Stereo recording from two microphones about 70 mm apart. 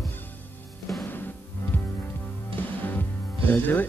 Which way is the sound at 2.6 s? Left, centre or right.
Left.